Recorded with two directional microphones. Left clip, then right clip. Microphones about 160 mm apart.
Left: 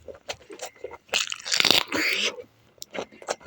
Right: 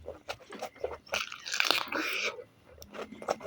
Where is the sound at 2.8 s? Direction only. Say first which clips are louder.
Left 7 dB; 25° left (ahead or behind).